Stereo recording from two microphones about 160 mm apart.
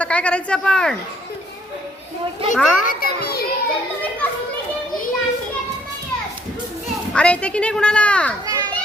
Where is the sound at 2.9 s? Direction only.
70° left (ahead or behind).